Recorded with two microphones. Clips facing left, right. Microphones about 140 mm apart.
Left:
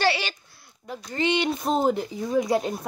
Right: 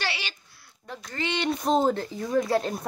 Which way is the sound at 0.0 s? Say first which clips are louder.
Left 9 dB; 40° left (ahead or behind).